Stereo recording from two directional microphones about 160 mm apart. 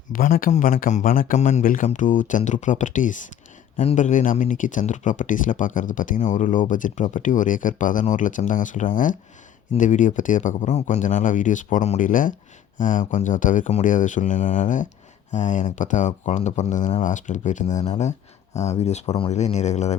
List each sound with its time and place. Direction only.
0.1 s speech: 60° left (ahead or behind); by 20.0 s 45° left (ahead or behind)